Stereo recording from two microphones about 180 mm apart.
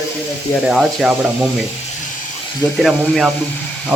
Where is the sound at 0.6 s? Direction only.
Centre (ahead or behind).